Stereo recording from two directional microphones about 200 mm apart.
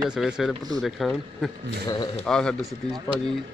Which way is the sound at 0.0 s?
5° right (ahead or behind).